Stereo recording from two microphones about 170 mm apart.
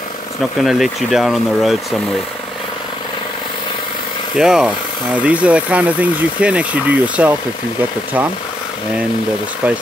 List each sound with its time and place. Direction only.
0.6 s speech: centre (ahead or behind)
4.4 s speech: 5° right (ahead or behind)